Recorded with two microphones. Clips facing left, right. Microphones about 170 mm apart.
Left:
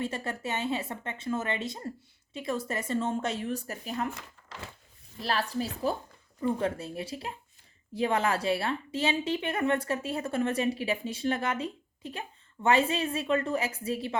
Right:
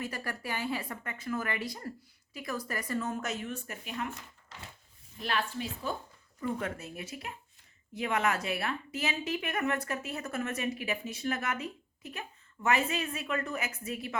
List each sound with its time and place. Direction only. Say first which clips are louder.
0.0 s a woman's voice: left 4 dB; 25° left (ahead or behind)
5.2 s a woman's voice: left 3 dB; 35° left (ahead or behind)